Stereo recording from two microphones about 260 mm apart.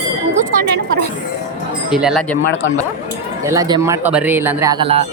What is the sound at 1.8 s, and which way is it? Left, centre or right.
Speech, centre.